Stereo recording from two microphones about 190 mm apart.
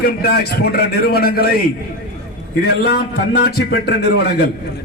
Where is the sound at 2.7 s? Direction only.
55° left (ahead or behind).